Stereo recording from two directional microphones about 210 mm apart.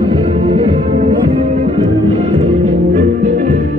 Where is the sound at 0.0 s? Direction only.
25° right (ahead or behind).